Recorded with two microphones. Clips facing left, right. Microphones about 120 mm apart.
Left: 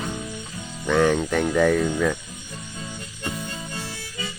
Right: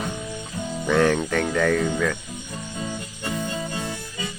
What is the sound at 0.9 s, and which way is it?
Speech, centre (ahead or behind).